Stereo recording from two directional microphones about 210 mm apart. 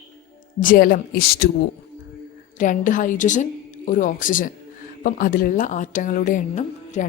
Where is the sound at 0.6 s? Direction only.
40° left (ahead or behind).